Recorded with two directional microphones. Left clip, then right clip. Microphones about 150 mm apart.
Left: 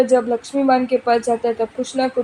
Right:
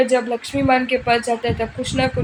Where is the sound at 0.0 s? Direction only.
30° left (ahead or behind).